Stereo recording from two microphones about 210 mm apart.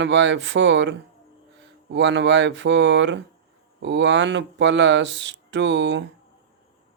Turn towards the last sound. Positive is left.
turn(degrees=-60)  # may be behind; listen again after turning